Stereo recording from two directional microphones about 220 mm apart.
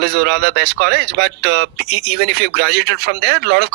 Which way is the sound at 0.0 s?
50° right (ahead or behind).